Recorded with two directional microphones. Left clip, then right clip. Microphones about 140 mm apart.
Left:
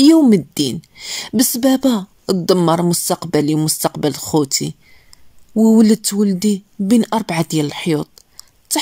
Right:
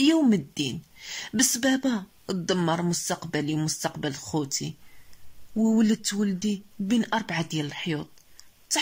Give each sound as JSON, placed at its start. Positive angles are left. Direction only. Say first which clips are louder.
{"t": 0.0, "sound": "a woman's voice", "louder": "left 11 dB", "side_deg": 40}